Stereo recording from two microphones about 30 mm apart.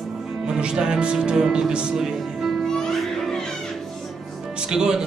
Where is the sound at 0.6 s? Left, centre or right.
Right.